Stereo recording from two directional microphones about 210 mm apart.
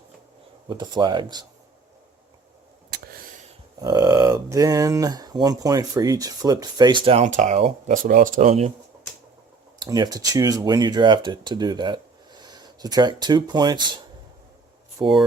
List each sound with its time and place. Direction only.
0.7 s speech: 20° right (ahead or behind)
3.8 s speech: 15° right (ahead or behind)
9.7 s speech: 20° right (ahead or behind)
14.9 s speech: 20° right (ahead or behind)